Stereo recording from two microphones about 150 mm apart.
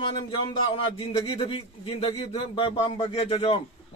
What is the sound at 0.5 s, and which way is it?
A man's voice, 40° left (ahead or behind).